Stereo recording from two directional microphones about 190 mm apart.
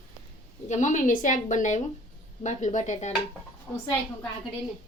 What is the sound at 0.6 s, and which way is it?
A woman's voice, 40° left (ahead or behind).